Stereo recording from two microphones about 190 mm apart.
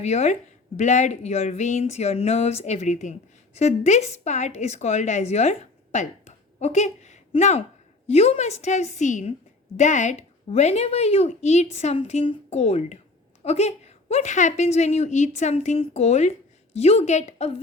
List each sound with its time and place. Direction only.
0.0 s speech: 35° left (ahead or behind)